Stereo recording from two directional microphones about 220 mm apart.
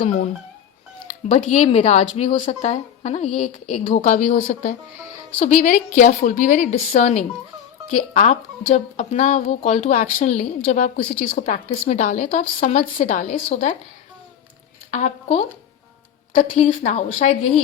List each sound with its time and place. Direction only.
0.0 s speech: 35° left (ahead or behind)
14.8 s a woman's voice: 30° left (ahead or behind)